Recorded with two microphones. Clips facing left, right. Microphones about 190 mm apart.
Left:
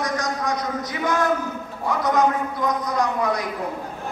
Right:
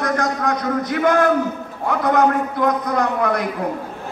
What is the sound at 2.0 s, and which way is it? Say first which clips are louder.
A man's voice: right 4 dB; 55° right (ahead or behind).